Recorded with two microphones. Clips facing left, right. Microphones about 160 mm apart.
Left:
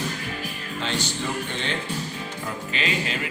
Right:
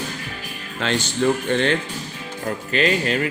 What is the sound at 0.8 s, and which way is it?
Speech, 70° right (ahead or behind).